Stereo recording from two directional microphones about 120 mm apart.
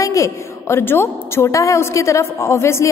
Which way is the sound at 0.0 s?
25° left (ahead or behind).